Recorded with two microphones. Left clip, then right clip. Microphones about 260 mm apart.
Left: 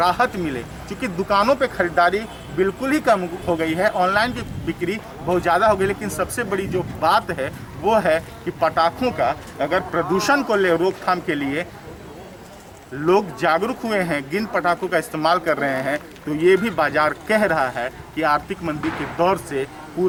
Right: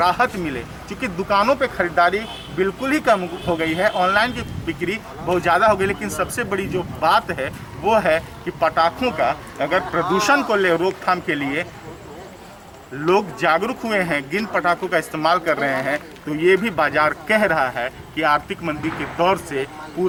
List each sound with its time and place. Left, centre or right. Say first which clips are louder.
0.0 s speech: right 1 dB; centre
13.0 s speech: even; centre